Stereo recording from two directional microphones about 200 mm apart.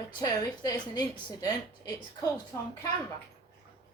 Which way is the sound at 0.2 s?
20° left (ahead or behind).